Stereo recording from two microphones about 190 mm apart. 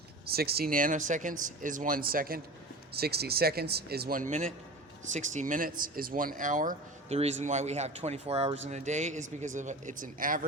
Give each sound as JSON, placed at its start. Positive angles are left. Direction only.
{"t": 0.3, "sound": "speech", "side_deg": -55}